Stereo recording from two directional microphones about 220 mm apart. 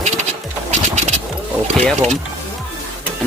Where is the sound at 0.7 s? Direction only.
30° right (ahead or behind).